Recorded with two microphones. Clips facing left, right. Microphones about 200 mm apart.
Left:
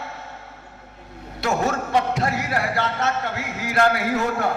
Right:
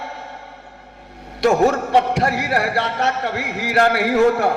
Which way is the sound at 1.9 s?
75° right (ahead or behind).